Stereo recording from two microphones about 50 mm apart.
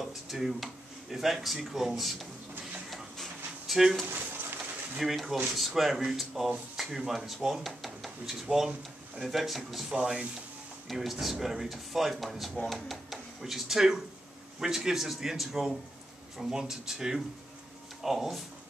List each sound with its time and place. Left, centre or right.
0.0 s speech: centre
2.9 s a sound: centre
4.9 s speech: centre
9.9 s a man's voice: centre
10.9 s a man's voice: centre